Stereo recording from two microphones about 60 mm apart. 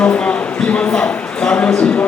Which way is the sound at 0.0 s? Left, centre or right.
Left.